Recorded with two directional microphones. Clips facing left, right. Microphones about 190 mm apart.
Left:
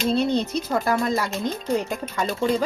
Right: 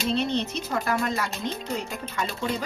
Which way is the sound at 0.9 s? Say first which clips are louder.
Left 4 dB; 35° left (ahead or behind).